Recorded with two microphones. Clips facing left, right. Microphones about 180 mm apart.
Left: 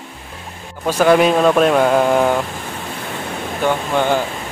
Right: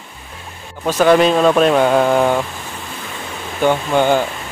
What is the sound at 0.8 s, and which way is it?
A man's voice, 5° left (ahead or behind).